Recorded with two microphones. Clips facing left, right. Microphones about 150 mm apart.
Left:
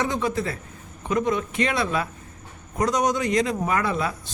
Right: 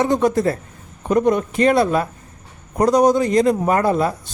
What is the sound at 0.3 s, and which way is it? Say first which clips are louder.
Speech: right 8 dB; 45° right (ahead or behind).